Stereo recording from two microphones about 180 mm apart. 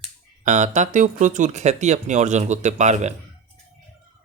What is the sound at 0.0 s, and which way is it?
Speech, 40° right (ahead or behind).